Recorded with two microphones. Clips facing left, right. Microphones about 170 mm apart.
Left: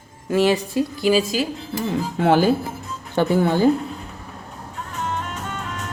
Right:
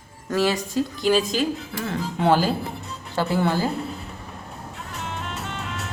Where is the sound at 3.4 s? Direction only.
20° left (ahead or behind).